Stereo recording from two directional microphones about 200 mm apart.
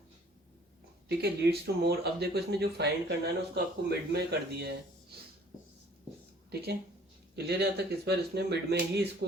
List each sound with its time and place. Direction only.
1.0 s speech: 55° right (ahead or behind)
6.5 s speech: 55° right (ahead or behind)